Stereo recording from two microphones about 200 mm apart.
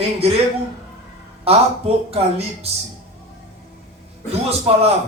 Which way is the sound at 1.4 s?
30° right (ahead or behind).